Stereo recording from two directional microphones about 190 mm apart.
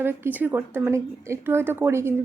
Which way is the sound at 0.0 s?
10° right (ahead or behind).